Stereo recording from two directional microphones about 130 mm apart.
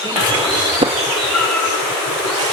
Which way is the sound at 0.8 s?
40° right (ahead or behind).